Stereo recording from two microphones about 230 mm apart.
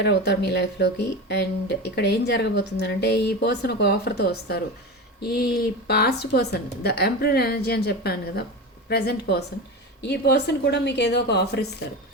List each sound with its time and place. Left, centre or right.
0.0 s speech: left